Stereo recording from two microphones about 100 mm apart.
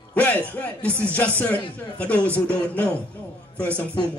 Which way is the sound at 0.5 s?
15° left (ahead or behind).